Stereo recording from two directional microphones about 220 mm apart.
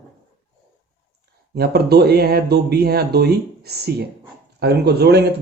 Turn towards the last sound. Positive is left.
turn(degrees=-45)  # may be behind; listen again after turning